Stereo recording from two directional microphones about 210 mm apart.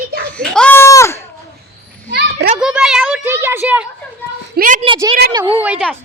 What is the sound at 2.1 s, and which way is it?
Children playing, 55° right (ahead or behind).